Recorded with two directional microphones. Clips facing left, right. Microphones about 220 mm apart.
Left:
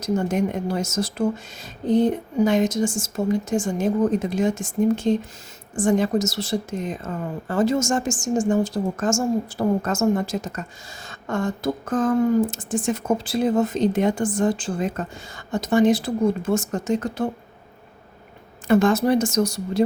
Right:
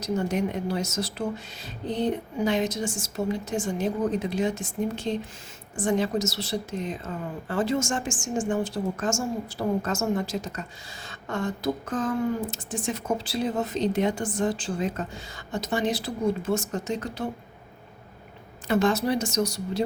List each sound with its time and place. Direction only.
0.0 s speech: 50° left (ahead or behind)
18.7 s speech: 50° left (ahead or behind)